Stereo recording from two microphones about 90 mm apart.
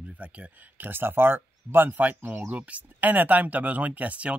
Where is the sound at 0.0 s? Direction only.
15° right (ahead or behind).